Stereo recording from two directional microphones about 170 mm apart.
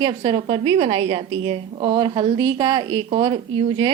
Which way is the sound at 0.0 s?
30° right (ahead or behind).